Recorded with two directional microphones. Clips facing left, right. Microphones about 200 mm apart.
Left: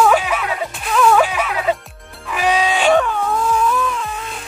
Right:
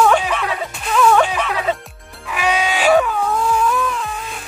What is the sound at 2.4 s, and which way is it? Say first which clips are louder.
Music: left 2 dB; 35° left (ahead or behind).